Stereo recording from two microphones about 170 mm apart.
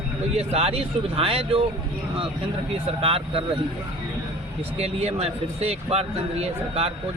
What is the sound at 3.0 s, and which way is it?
Speech, 35° right (ahead or behind).